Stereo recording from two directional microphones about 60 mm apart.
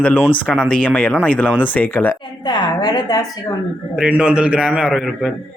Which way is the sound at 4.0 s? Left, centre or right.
Centre.